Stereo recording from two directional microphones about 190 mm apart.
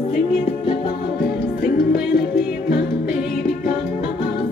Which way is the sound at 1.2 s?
55° left (ahead or behind).